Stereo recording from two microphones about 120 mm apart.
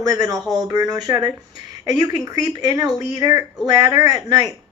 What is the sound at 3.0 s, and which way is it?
Speech, 90° left.